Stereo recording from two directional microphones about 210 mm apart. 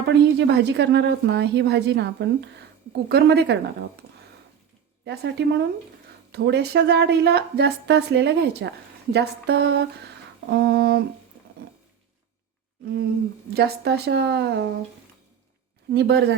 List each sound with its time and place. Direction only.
0.0 s a woman's voice: 55° right (ahead or behind)
5.0 s a woman's voice: 55° right (ahead or behind)
13.5 s a woman's voice: 50° right (ahead or behind)
15.9 s a woman's voice: 50° right (ahead or behind)